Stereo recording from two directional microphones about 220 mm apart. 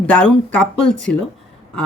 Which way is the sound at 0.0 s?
5° left (ahead or behind).